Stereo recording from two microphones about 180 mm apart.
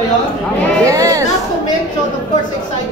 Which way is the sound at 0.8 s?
20° right (ahead or behind).